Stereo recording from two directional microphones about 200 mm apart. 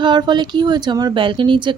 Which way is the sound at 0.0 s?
20° right (ahead or behind).